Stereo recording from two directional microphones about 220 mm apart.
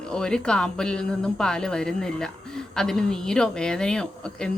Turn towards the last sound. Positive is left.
turn(degrees=5)  # may be behind; listen again after turning